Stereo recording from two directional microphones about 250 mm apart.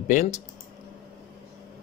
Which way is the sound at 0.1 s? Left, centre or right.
Left.